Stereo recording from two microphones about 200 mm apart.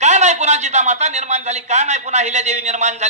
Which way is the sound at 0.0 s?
35° right (ahead or behind).